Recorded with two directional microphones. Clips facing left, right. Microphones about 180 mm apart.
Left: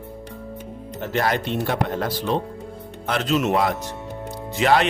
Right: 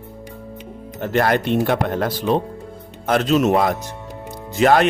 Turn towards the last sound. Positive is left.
turn(degrees=-45)  # may be behind; listen again after turning